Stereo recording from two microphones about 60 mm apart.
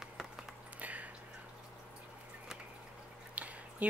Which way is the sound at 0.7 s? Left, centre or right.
Right.